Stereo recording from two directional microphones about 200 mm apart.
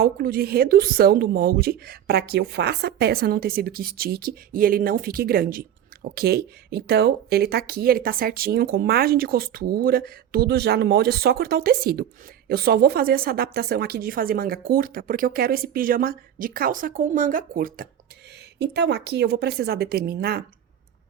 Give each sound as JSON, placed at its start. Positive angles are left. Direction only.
{"t": 0.0, "sound": "a woman's voice", "side_deg": -50}
{"t": 18.6, "sound": "a woman's voice", "side_deg": -55}